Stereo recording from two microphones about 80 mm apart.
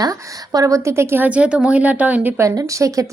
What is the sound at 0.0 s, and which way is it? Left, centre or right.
A woman's voice, right.